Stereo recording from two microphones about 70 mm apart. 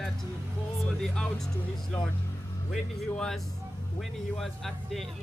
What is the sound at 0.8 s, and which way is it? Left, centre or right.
Music, centre.